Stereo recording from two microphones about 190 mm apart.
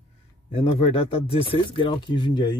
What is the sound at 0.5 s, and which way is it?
Speech, 30° left (ahead or behind).